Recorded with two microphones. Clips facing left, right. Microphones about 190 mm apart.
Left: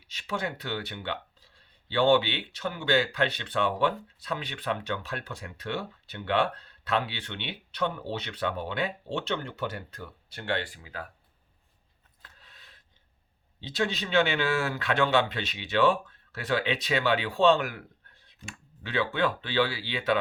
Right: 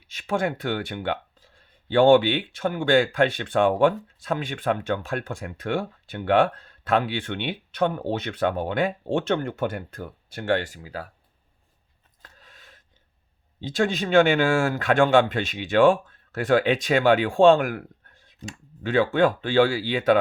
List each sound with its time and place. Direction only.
0.1 s speech: 50° right (ahead or behind)
12.2 s a sound: 45° right (ahead or behind)
13.6 s speech: 50° right (ahead or behind)